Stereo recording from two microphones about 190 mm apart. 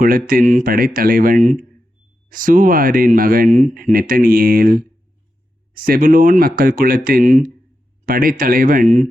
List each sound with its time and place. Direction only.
0.3 s speech: 45° right (ahead or behind)